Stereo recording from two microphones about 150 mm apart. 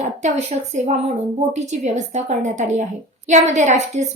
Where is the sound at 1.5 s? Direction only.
50° right (ahead or behind).